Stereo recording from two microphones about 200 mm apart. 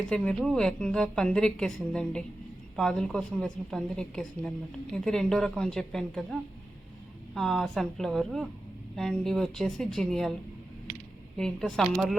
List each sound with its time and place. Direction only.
0.1 s a woman's voice: 5° left (ahead or behind)
7.3 s a woman's voice: centre (ahead or behind)
11.3 s a woman's voice: centre (ahead or behind)